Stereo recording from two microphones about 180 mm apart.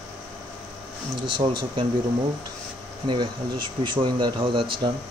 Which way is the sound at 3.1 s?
25° right (ahead or behind).